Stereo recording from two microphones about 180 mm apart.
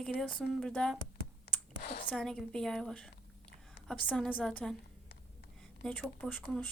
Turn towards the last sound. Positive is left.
turn(degrees=5)  # may be behind; listen again after turning